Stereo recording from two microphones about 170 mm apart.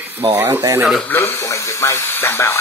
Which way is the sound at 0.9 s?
5° left (ahead or behind).